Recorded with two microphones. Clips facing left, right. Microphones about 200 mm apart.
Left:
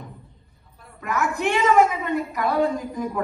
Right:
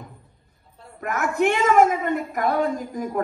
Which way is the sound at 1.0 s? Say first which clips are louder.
Right 3 dB; 50° right (ahead or behind).